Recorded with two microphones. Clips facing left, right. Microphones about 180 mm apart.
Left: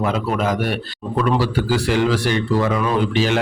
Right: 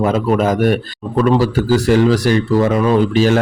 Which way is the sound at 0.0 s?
45° right (ahead or behind).